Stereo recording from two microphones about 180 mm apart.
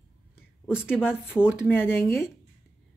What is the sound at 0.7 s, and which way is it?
Speech, 5° right (ahead or behind).